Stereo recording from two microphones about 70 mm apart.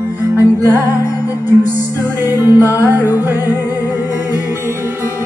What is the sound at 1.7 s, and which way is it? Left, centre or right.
Music, right.